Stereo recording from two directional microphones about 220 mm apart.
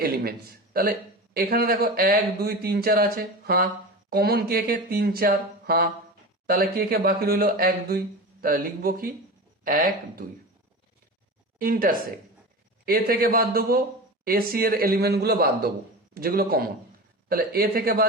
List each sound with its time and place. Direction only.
0.0 s a man's voice: 45° right (ahead or behind)
11.6 s a man's voice: 40° right (ahead or behind)